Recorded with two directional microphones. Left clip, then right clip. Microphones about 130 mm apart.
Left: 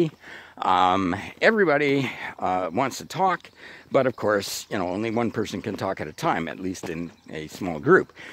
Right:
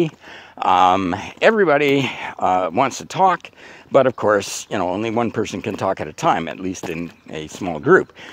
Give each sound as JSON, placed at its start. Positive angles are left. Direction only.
{"t": 0.6, "sound": "speech", "side_deg": 30}